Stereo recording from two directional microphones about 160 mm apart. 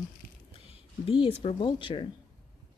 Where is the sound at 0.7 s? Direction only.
35° left (ahead or behind).